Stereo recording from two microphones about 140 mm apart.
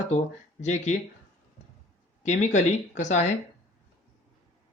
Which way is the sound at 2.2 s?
55° left (ahead or behind).